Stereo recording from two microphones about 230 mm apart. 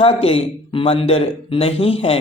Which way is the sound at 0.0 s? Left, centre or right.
Left.